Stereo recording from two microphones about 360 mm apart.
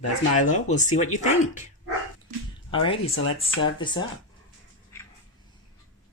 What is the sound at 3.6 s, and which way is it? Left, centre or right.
Speech, centre.